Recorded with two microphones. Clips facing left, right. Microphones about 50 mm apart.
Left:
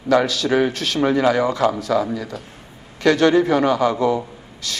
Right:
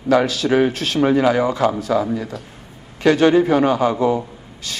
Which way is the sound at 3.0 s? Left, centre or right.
Right.